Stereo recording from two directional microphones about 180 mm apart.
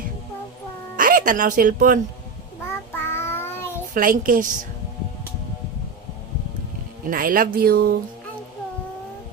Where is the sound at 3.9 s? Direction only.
50° right (ahead or behind).